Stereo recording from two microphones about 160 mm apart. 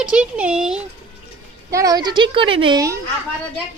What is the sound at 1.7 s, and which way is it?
A woman's voice, 20° right (ahead or behind).